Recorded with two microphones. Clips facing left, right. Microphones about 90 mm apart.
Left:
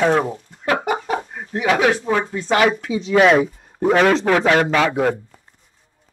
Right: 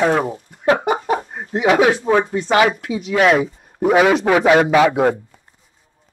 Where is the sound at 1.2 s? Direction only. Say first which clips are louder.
Right 3 dB; 30° right (ahead or behind).